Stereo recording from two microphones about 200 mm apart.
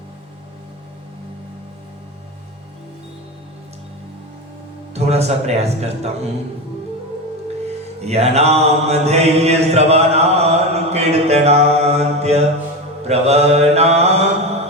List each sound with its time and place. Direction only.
4.9 s a man's voice: 30° right (ahead or behind)
8.0 s mantra: 30° right (ahead or behind)